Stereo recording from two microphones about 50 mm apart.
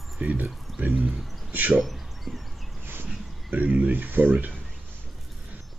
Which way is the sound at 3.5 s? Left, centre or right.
Right.